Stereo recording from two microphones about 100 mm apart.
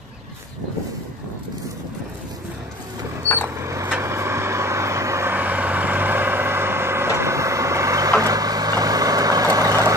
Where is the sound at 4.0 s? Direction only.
25° right (ahead or behind).